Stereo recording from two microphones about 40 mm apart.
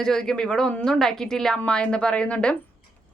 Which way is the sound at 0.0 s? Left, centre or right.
Centre.